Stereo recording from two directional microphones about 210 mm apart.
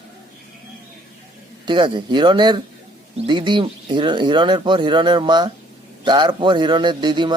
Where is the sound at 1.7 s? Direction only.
20° right (ahead or behind).